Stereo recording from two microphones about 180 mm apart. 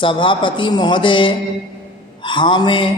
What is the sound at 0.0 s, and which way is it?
Speech, 30° left (ahead or behind).